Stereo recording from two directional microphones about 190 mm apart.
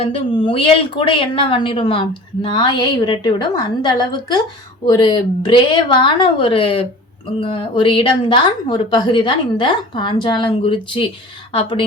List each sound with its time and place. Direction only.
0.0 s a woman's voice: 30° left (ahead or behind)